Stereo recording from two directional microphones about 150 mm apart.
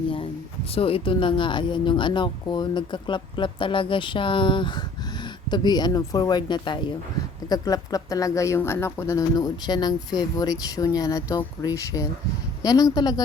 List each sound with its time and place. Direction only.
0.7 s speech: 40° left (ahead or behind)